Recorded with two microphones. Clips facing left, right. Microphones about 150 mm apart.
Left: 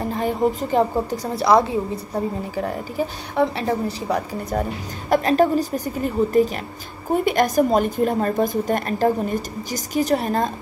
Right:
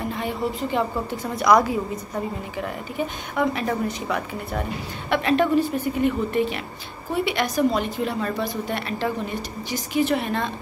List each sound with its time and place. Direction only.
0.0 s a woman's voice: 40° left (ahead or behind)
1.4 s a woman's voice: 30° left (ahead or behind)